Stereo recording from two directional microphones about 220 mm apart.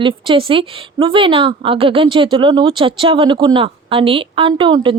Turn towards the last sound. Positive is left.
turn(degrees=-20)  # may be behind; listen again after turning